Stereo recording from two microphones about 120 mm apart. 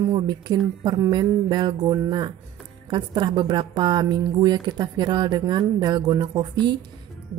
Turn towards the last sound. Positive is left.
turn(degrees=-40)  # may be behind; listen again after turning